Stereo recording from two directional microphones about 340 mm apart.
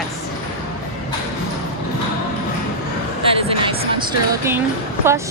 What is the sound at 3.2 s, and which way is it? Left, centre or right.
Music, centre.